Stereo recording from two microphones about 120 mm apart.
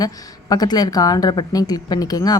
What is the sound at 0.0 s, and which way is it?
Speech, 35° left (ahead or behind).